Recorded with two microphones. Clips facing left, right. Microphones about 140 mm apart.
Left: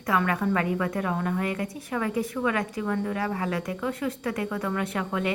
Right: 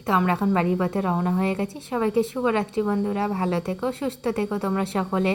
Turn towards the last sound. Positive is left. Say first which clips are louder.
# right 4 dB
turn(degrees=-30)  # may be behind; listen again after turning